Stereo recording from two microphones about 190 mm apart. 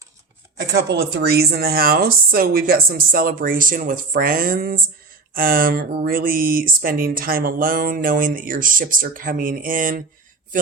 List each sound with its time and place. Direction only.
0.5 s speech: 60° right (ahead or behind); by 10.0 s 45° right (ahead or behind)